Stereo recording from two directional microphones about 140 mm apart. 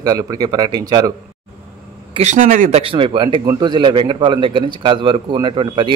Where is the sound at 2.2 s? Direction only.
65° right (ahead or behind).